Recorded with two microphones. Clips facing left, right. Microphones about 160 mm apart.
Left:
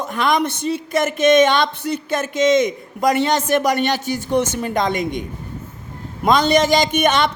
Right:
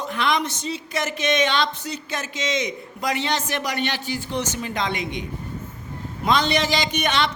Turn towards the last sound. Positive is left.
turn(degrees=50)  # may be behind; listen again after turning